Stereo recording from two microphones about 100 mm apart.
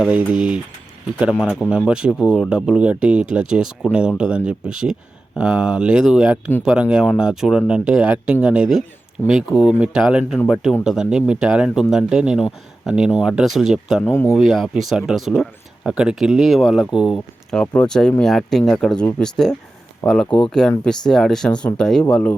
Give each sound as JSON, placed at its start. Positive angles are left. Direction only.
{"t": 0.1, "sound": "speech", "side_deg": -10}
{"t": 1.4, "sound": "speech", "side_deg": 10}
{"t": 1.9, "sound": "speech", "side_deg": -10}
{"t": 9.2, "sound": "speech", "side_deg": 25}
{"t": 9.8, "sound": "speech", "side_deg": -10}
{"t": 14.0, "sound": "speech", "side_deg": 25}
{"t": 14.3, "sound": "speech", "side_deg": 0}
{"t": 17.5, "sound": "speech", "side_deg": 10}